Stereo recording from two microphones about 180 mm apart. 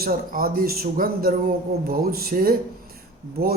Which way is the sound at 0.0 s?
55° right (ahead or behind).